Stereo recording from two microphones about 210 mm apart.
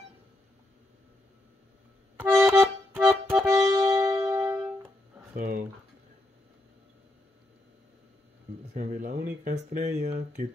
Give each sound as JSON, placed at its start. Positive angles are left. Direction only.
{"t": 2.1, "sound": "music", "side_deg": -10}
{"t": 5.3, "sound": "speech", "side_deg": -40}
{"t": 8.7, "sound": "speech", "side_deg": -40}